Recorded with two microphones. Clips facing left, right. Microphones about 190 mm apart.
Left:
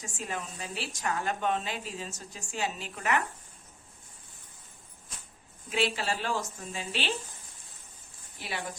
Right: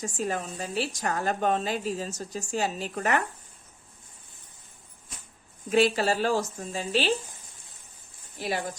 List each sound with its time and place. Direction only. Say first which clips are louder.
0.0 s a woman's voice: right 7 dB; 40° right (ahead or behind)
5.7 s a woman's voice: right 7 dB; 40° right (ahead or behind)
8.4 s a woman's voice: right 8 dB; 40° right (ahead or behind)